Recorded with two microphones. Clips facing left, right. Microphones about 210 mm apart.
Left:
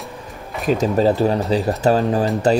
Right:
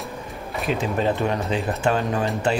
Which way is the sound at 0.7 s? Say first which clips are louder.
Left 7 dB; 40° left (ahead or behind).